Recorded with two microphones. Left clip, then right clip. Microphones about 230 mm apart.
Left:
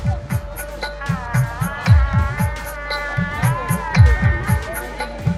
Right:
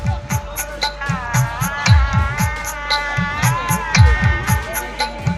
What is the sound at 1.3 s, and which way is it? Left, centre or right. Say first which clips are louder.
Music: right 4 dB; left.